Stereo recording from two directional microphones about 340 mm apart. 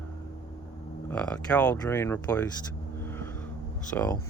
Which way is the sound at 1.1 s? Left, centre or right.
Centre.